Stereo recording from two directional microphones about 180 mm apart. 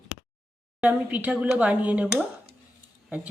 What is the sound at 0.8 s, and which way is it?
Speech, 10° right (ahead or behind).